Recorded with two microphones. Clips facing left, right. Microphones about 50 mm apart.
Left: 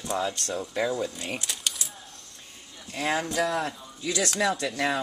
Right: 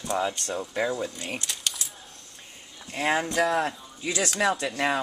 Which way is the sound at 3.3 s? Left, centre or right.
Centre.